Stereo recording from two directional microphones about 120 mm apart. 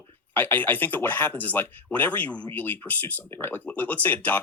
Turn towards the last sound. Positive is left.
turn(degrees=15)  # may be behind; listen again after turning